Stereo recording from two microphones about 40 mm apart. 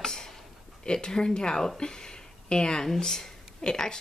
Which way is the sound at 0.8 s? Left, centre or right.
Left.